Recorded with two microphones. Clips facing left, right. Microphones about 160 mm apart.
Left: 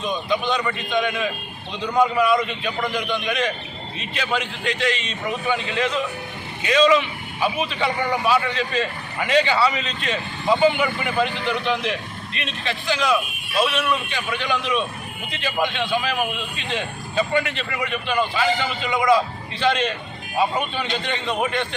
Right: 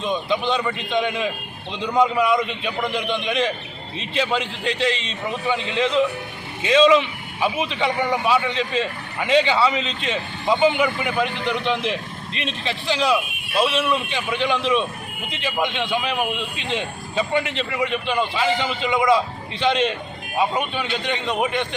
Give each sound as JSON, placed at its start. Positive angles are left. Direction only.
{"t": 0.0, "sound": "a man's voice", "side_deg": -25}